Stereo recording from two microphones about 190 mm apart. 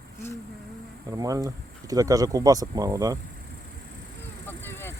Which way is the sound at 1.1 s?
20° right (ahead or behind).